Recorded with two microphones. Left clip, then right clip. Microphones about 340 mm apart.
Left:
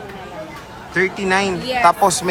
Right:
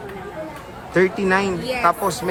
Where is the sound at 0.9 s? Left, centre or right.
Centre.